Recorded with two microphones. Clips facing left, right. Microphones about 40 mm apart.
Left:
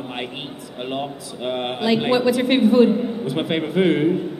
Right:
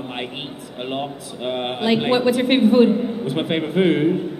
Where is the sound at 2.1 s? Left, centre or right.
Right.